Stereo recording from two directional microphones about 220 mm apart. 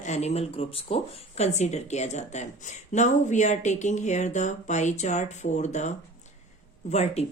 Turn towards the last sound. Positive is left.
turn(degrees=30)  # may be behind; listen again after turning